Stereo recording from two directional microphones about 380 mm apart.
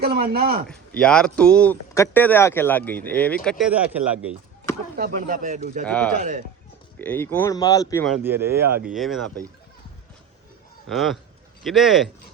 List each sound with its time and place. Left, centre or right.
0.0 s speech: right
0.7 s speech: centre
4.9 s speech: right
5.8 s speech: centre
6.1 s speech: centre
7.0 s speech: centre
10.8 s speech: centre